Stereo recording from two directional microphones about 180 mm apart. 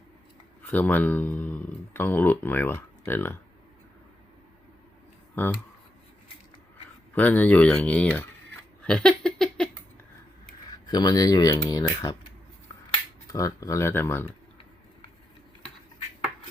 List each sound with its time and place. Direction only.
0.7 s speech: 10° left (ahead or behind)
5.3 s speech: 10° left (ahead or behind)
7.2 s speech: 10° left (ahead or behind)
8.8 s a sound: 5° left (ahead or behind)
10.7 s speech: 25° left (ahead or behind)